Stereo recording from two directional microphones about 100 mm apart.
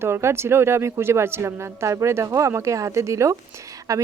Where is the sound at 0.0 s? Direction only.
25° right (ahead or behind).